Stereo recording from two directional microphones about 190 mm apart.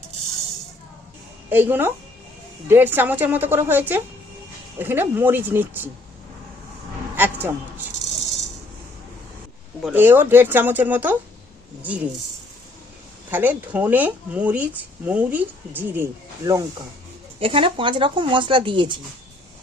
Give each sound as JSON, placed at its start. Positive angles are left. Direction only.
{"t": 1.5, "sound": "a woman's voice", "side_deg": -10}
{"t": 7.2, "sound": "a man's voice", "side_deg": -10}
{"t": 9.8, "sound": "speech", "side_deg": -10}
{"t": 13.3, "sound": "speech", "side_deg": -10}
{"t": 17.4, "sound": "speech", "side_deg": -30}